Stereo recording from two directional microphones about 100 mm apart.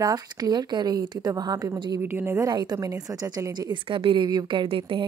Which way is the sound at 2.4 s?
45° right (ahead or behind).